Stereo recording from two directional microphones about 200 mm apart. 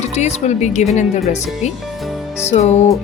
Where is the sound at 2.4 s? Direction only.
35° left (ahead or behind).